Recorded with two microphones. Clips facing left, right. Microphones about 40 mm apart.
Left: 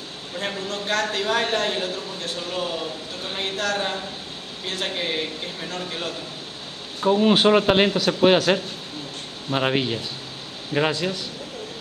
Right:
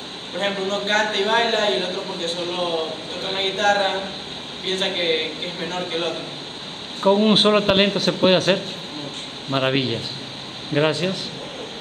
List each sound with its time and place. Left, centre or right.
0.4 s a man's voice: right
7.1 s a man's voice: centre
7.9 s a man's voice: right
9.5 s speech: centre
10.9 s a man's voice: right